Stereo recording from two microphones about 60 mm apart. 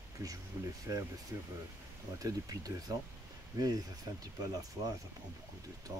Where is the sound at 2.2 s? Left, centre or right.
Right.